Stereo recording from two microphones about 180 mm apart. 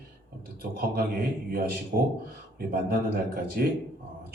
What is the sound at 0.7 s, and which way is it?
A man's voice, 55° right (ahead or behind).